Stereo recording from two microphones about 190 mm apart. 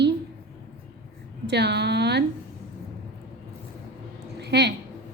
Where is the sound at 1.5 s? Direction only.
60° right (ahead or behind).